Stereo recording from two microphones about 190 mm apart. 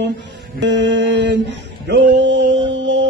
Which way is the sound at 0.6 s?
70° right (ahead or behind).